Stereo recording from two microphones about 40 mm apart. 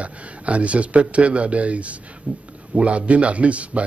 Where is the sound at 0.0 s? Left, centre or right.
Right.